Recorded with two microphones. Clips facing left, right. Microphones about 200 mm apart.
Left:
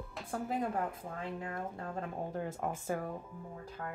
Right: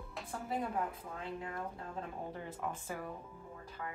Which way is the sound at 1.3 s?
50° left (ahead or behind).